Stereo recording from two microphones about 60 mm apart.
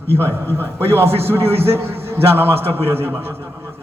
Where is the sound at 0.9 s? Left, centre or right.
Right.